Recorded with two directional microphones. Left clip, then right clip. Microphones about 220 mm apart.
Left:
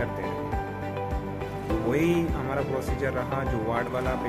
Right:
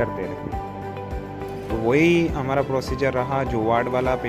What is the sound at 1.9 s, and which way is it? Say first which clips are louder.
Speech: right 8 dB; 20° right (ahead or behind).